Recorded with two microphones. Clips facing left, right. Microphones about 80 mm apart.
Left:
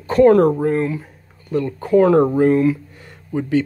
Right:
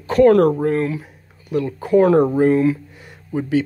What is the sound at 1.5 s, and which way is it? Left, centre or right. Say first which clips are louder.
Speech: even; centre.